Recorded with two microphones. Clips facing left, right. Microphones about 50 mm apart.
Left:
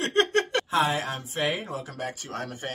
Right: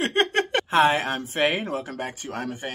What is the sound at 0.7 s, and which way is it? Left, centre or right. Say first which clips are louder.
A woman's voice: right 5 dB; right.